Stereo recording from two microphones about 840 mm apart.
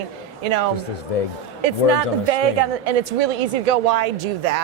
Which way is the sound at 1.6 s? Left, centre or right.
Right.